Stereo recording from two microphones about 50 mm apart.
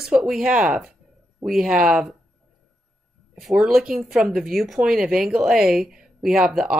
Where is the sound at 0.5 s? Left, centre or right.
Right.